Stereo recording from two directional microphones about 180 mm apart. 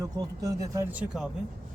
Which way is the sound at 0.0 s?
20° right (ahead or behind).